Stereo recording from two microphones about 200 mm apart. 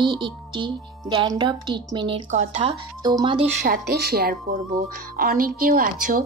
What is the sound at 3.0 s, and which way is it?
Speech, 20° right (ahead or behind).